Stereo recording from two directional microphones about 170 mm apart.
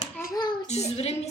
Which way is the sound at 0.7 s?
40° left (ahead or behind).